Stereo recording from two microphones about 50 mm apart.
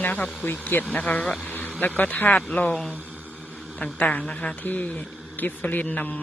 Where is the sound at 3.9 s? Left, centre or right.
Left.